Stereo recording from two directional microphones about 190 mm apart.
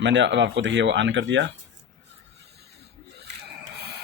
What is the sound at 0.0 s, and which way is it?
Speech, 70° right (ahead or behind).